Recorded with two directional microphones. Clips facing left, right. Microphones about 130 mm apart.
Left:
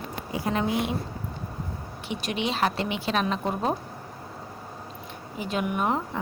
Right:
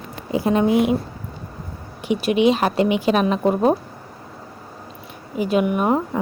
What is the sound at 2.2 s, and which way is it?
A woman's voice, 10° right (ahead or behind).